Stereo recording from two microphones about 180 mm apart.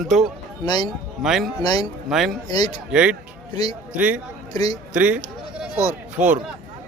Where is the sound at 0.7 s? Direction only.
25° left (ahead or behind).